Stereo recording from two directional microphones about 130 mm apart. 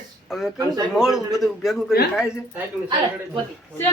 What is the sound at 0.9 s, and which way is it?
A man's voice, centre (ahead or behind).